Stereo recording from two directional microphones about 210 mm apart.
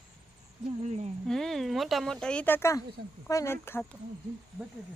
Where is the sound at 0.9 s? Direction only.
30° right (ahead or behind).